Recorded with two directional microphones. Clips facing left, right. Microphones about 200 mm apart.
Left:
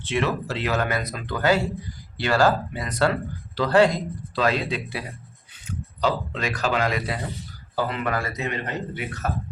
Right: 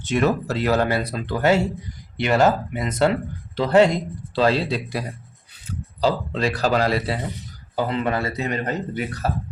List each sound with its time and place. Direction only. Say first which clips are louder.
0.0 s speech: right 4 dB; 40° right (ahead or behind)